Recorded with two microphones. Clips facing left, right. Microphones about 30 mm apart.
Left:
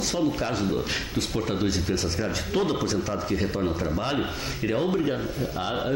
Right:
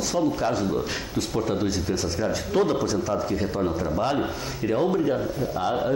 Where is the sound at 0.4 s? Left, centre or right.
Centre.